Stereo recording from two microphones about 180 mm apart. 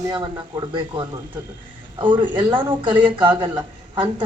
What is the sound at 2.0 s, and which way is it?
Speech, 25° right (ahead or behind).